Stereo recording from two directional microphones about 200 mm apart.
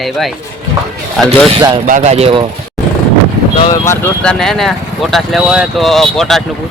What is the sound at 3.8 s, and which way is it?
Speech, 10° left (ahead or behind).